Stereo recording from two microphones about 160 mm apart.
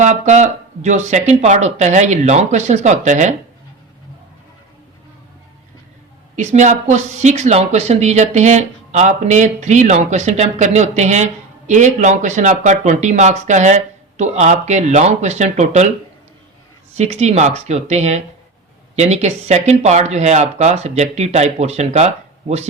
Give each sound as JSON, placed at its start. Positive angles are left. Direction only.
{"t": 0.0, "sound": "a woman's voice", "side_deg": -45}
{"t": 6.3, "sound": "a woman's voice", "side_deg": -45}
{"t": 16.9, "sound": "a woman's voice", "side_deg": -45}